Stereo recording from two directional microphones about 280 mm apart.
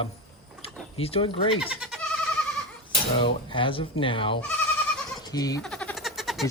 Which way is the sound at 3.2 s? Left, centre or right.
Centre.